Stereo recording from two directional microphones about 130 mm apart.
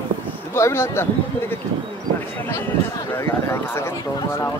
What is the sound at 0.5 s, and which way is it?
Speech, 20° left (ahead or behind).